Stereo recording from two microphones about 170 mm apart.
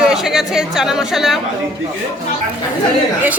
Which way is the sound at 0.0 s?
5° right (ahead or behind).